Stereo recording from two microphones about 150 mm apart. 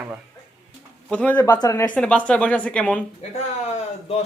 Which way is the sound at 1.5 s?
25° left (ahead or behind).